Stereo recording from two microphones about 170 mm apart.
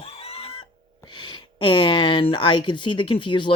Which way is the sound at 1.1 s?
30° left (ahead or behind).